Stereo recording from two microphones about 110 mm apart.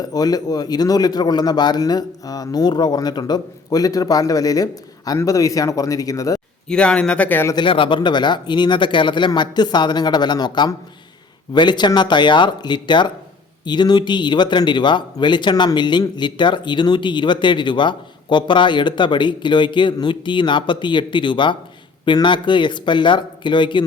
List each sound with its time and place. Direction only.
0.0 s a man's voice: 35° left (ahead or behind)
6.7 s speech: 10° left (ahead or behind)
7.5 s speech: 50° left (ahead or behind)